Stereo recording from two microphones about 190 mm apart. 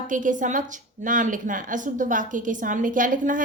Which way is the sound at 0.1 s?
45° right (ahead or behind).